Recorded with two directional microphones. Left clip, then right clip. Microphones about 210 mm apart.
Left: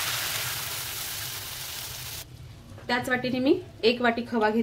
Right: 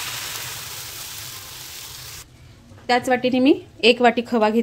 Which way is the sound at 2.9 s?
40° right (ahead or behind).